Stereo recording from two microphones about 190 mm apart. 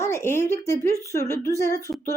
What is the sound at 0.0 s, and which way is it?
Speech, 15° left (ahead or behind).